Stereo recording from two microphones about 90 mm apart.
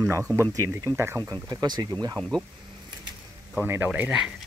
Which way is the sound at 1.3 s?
45° right (ahead or behind).